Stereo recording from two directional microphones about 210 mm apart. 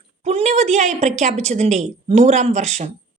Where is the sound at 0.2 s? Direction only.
30° right (ahead or behind).